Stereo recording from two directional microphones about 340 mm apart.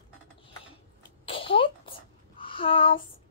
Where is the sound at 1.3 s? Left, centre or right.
Centre.